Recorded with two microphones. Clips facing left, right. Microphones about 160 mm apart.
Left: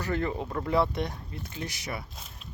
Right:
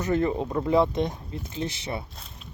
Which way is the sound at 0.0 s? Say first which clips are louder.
Right 6 dB; 20° right (ahead or behind).